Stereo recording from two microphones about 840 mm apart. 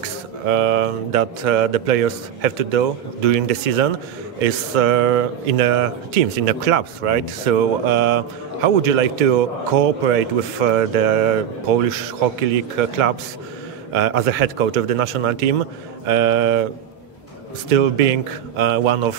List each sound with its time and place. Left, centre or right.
0.5 s speech: right
13.9 s speech: right
17.6 s speech: right